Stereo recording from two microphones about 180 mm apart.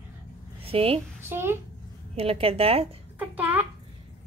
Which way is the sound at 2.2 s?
35° right (ahead or behind).